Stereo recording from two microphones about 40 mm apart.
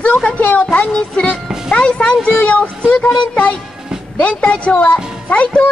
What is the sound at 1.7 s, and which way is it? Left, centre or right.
A woman's voice, left.